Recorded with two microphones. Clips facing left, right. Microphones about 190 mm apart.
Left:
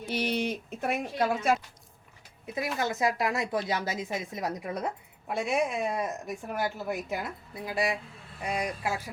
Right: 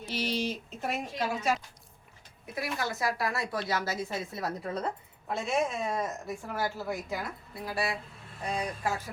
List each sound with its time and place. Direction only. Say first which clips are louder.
0.1 s speech: left 2 dB; 60° left (ahead or behind)
2.6 s speech: left 4 dB; 20° left (ahead or behind)